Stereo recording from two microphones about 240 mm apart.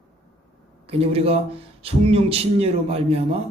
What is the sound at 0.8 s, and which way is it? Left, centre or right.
A man's voice, right.